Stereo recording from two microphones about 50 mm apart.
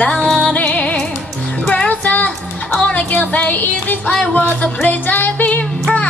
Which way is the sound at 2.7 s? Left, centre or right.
Left.